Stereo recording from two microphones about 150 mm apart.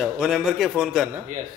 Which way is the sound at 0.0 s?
5° right (ahead or behind).